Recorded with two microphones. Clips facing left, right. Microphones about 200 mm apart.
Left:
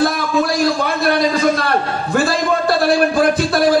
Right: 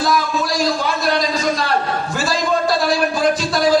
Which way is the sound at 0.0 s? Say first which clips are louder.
Left 3 dB; 60° left (ahead or behind).